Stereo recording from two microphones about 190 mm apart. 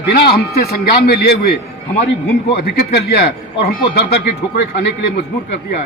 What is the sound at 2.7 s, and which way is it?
A man's voice, 55° left (ahead or behind).